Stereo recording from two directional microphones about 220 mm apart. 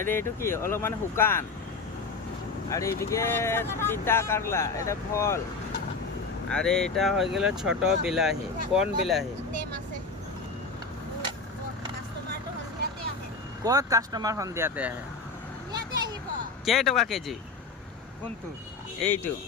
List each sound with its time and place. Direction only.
0.1 s speech: 10° left (ahead or behind)
2.6 s speech: 15° left (ahead or behind)
6.5 s speech: 5° left (ahead or behind)
13.7 s speech: 15° right (ahead or behind)
15.7 s a sound: 20° right (ahead or behind)
16.6 s speech: centre (ahead or behind)
19.0 s speech: 10° left (ahead or behind)